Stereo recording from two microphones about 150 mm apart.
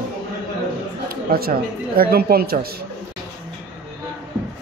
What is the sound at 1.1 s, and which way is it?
Speech, 85° right.